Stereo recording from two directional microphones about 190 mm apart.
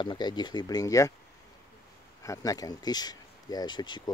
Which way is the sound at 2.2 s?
20° left (ahead or behind).